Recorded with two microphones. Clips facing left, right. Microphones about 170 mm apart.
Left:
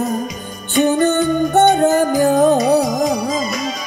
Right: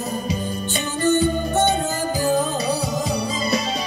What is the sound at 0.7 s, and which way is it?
Music, 60° left (ahead or behind).